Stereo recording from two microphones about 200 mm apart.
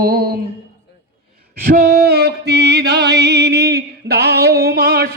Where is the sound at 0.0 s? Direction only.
50° right (ahead or behind).